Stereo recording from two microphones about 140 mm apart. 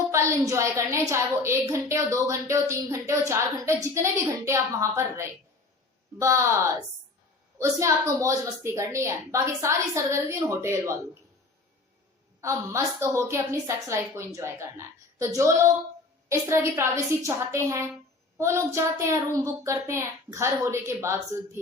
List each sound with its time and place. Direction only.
0.1 s a woman's voice: 20° right (ahead or behind)
7.6 s a woman's voice: 20° right (ahead or behind)
12.4 s a woman's voice: 20° right (ahead or behind)